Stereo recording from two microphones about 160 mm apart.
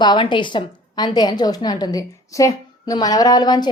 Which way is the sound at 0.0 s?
30° left (ahead or behind).